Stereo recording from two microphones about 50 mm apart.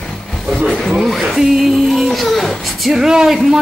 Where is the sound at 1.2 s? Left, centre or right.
Centre.